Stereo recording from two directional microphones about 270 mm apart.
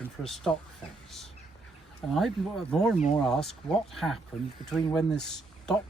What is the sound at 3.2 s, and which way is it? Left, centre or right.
Speech, centre.